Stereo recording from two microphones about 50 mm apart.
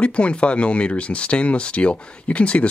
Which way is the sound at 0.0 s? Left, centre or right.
Left.